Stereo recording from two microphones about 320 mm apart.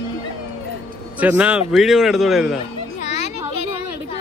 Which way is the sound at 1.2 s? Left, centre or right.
Centre.